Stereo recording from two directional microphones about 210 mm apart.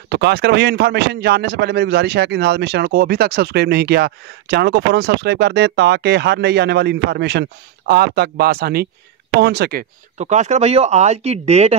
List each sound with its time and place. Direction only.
0.1 s a man's voice: 50° right (ahead or behind)
10.1 s speech: 35° right (ahead or behind)